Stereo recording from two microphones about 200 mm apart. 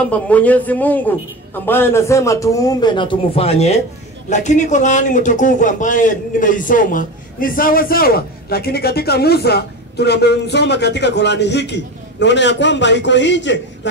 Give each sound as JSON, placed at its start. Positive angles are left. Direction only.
{"t": 0.1, "sound": "a man's voice", "side_deg": 5}